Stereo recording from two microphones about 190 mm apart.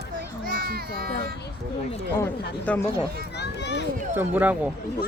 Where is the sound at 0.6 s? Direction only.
55° right (ahead or behind).